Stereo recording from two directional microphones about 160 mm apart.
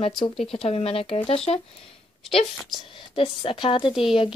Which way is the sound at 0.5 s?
40° left (ahead or behind).